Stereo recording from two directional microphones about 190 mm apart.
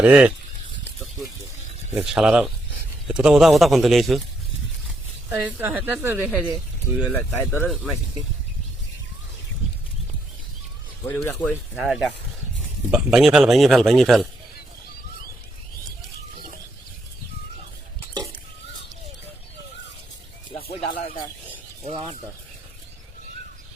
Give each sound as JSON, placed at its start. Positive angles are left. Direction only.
{"t": 0.0, "sound": "speech", "side_deg": -10}
{"t": 1.9, "sound": "speech", "side_deg": 0}
{"t": 5.3, "sound": "speech", "side_deg": -10}
{"t": 7.1, "sound": "speech", "side_deg": 5}
{"t": 7.7, "sound": "speech", "side_deg": 0}
{"t": 11.0, "sound": "speech", "side_deg": 10}
{"t": 11.8, "sound": "speech", "side_deg": 0}
{"t": 21.8, "sound": "speech", "side_deg": -25}